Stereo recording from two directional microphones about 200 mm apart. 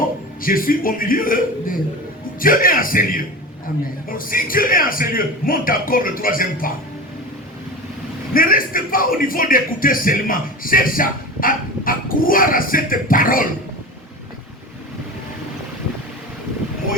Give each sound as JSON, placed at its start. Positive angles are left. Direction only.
{"t": 0.4, "sound": "a man's voice", "side_deg": 45}
{"t": 8.3, "sound": "a man's voice", "side_deg": 45}